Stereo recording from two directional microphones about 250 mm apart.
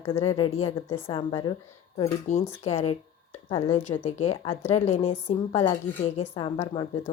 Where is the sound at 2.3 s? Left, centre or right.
Left.